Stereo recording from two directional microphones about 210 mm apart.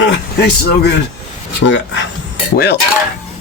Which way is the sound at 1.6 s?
60° left (ahead or behind).